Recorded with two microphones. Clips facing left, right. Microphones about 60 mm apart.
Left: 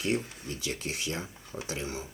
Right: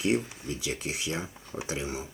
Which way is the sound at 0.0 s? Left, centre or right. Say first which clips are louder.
Right 3 dB; right.